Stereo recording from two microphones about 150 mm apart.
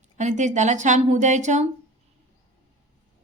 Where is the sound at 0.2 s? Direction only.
55° right (ahead or behind).